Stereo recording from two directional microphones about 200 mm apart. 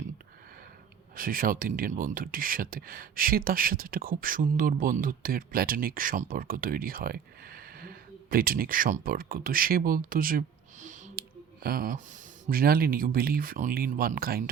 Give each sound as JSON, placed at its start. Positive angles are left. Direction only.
{"t": 1.1, "sound": "speech", "side_deg": -45}